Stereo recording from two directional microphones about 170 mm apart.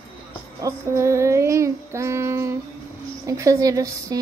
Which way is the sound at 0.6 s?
15° right (ahead or behind).